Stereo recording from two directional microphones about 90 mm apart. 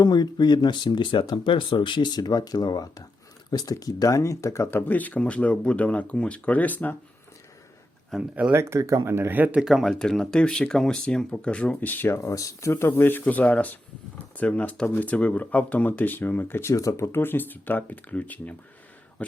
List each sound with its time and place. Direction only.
0.0 s speech: 50° left (ahead or behind); by 4.7 s 35° left (ahead or behind)
4.7 s speech: 20° left (ahead or behind)
8.1 s speech: 5° left (ahead or behind)
8.5 s speech: 35° right (ahead or behind)
9.6 s speech: 5° right (ahead or behind)
9.9 s speech: 5° left (ahead or behind); by 12.3 s 25° left (ahead or behind)
12.3 s speech: 35° left (ahead or behind); by 18.5 s 15° left (ahead or behind)